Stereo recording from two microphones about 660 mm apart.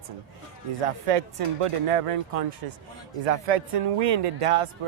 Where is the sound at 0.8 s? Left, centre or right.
Right.